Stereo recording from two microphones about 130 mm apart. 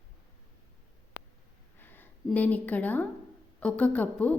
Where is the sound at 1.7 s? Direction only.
15° left (ahead or behind).